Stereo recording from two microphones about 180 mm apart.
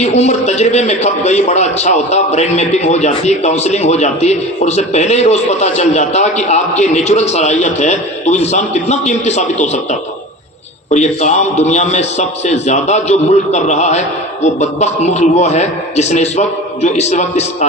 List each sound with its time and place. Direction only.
0.0 s a man's voice: 40° left (ahead or behind)
10.9 s a man's voice: 40° left (ahead or behind)